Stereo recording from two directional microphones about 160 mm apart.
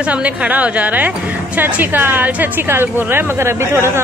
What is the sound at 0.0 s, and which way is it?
A woman's voice, 10° right (ahead or behind).